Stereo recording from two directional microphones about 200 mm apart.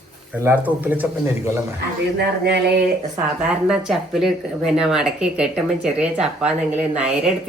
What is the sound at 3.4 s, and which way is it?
Speech, 5° right (ahead or behind).